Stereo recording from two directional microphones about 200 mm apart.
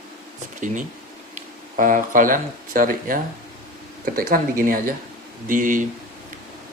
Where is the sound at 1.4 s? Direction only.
40° right (ahead or behind).